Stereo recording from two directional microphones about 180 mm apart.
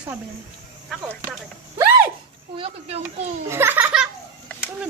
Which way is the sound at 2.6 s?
35° right (ahead or behind).